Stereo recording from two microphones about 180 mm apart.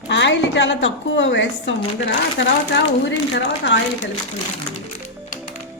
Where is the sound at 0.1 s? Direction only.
80° left.